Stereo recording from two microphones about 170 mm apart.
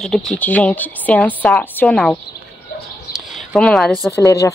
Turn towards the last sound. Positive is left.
turn(degrees=20)  # may be behind; listen again after turning